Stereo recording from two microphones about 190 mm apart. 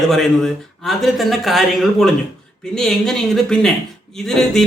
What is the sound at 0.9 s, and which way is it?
Speech, centre (ahead or behind).